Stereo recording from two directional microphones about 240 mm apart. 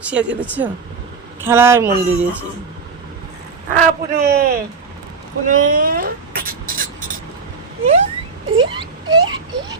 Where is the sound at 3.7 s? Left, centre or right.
Right.